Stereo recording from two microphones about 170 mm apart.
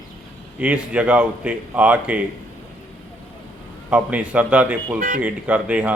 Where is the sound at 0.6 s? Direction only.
10° right (ahead or behind).